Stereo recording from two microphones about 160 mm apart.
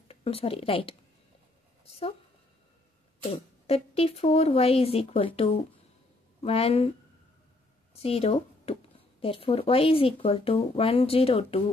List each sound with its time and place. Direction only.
0.1 s a woman's voice: 35° left (ahead or behind)
1.9 s a sound: 40° left (ahead or behind)
3.3 s speech: 40° left (ahead or behind)
7.9 s speech: 40° left (ahead or behind)